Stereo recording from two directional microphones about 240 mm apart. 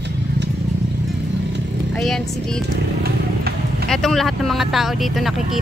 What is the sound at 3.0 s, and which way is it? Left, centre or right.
Vehicle, right.